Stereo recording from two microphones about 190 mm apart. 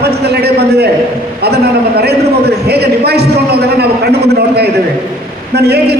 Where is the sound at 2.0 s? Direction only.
60° right (ahead or behind).